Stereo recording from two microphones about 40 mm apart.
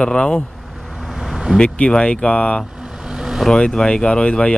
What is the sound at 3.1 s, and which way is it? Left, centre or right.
Vehicle, centre.